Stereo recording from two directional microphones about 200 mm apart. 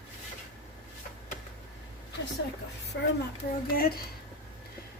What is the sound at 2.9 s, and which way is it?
A child's voice, 60° left (ahead or behind).